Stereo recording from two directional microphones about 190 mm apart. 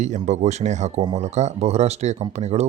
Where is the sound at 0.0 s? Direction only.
40° right (ahead or behind).